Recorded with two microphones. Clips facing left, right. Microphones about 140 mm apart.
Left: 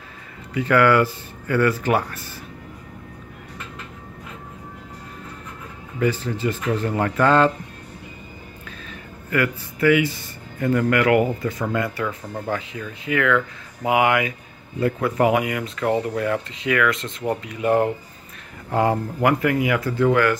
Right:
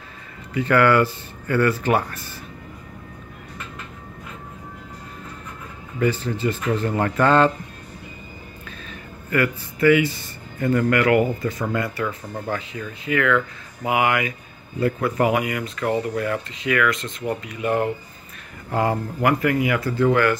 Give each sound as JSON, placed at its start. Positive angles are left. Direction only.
{"t": 0.6, "sound": "speech", "side_deg": 10}
{"t": 6.3, "sound": "speech", "side_deg": 5}
{"t": 9.3, "sound": "speech", "side_deg": 5}
{"t": 18.7, "sound": "speech", "side_deg": 20}
{"t": 20.1, "sound": "speech", "side_deg": 5}